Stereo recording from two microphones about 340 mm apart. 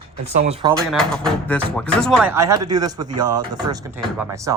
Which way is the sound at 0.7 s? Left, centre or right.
Centre.